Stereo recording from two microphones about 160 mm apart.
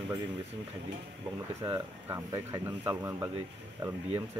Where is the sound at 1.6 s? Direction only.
25° right (ahead or behind).